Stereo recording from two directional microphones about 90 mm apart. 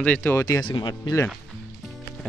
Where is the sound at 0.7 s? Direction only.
55° left (ahead or behind).